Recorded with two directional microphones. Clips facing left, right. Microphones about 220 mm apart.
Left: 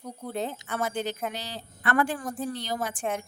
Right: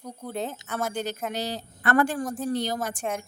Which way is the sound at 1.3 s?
40° right (ahead or behind).